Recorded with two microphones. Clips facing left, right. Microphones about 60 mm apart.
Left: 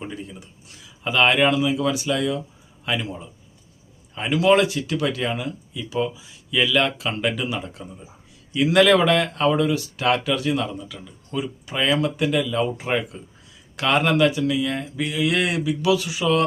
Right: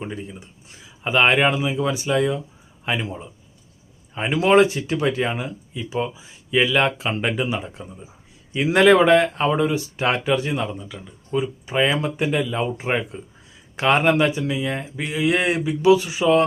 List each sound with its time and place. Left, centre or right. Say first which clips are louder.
0.0 s speech: right 2 dB; centre